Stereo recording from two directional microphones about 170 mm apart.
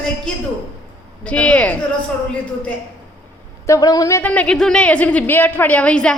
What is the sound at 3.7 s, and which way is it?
Speech, 20° left (ahead or behind).